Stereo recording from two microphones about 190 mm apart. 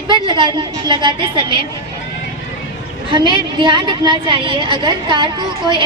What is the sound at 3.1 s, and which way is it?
A woman's voice, 25° right (ahead or behind).